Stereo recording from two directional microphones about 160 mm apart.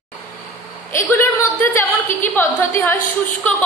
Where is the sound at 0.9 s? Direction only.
15° left (ahead or behind).